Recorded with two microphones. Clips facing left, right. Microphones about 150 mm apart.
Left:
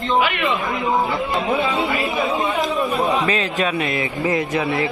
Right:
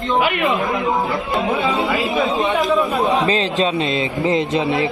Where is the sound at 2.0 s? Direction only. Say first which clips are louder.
Right 2 dB; 25° right (ahead or behind).